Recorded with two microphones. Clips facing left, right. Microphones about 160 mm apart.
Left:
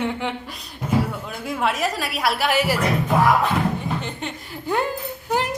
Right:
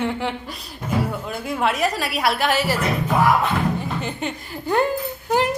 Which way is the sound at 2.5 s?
10° left (ahead or behind).